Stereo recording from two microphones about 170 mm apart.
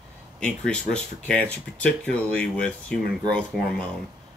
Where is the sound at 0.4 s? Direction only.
5° left (ahead or behind).